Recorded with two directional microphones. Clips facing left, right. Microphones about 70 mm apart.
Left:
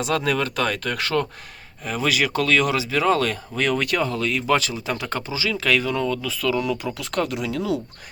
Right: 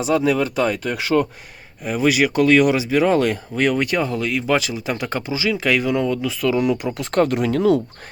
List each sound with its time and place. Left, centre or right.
0.0 s speech: centre
7.0 s speech: right